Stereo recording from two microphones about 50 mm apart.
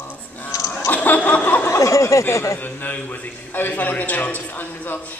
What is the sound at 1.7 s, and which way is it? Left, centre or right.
Speech, left.